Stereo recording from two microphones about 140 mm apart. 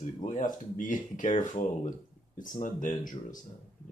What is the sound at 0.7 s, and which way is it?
Speech, 70° left (ahead or behind).